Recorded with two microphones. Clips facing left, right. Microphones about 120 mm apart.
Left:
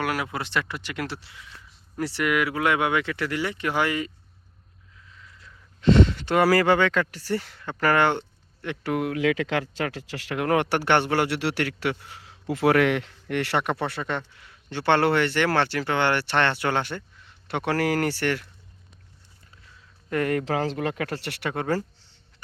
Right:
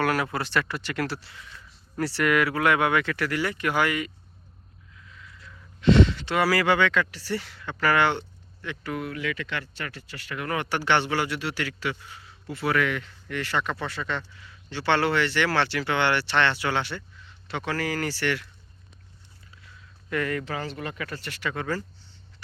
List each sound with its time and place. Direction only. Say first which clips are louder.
0.0 s speech: right 2 dB; 15° left (ahead or behind); by 4.1 s 30° left (ahead or behind)
5.8 s speech: even; 45° left (ahead or behind)
8.6 s speech: left 5 dB; 65° left (ahead or behind)
17.7 s speech: left 5 dB; 60° left (ahead or behind)
20.1 s speech: left 4 dB; 50° left (ahead or behind)
20.4 s speech: left 7 dB; 90° left; by 21.8 s 60° left (ahead or behind)